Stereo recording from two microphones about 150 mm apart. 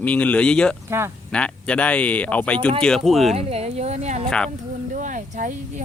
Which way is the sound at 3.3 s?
45° right (ahead or behind).